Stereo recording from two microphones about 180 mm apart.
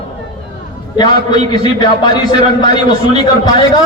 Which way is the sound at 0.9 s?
25° left (ahead or behind).